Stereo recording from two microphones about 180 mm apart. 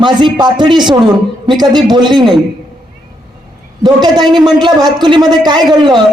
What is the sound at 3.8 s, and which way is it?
A man's voice, 25° right (ahead or behind).